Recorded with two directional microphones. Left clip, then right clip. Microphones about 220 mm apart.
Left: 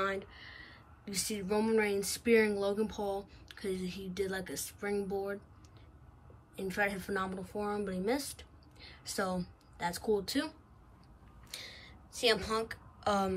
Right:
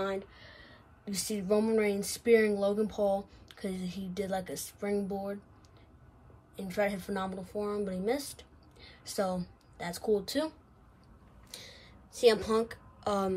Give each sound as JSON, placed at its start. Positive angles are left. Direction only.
{"t": 0.0, "sound": "speech", "side_deg": -5}
{"t": 6.5, "sound": "a woman's voice", "side_deg": -5}
{"t": 11.5, "sound": "a sound", "side_deg": -5}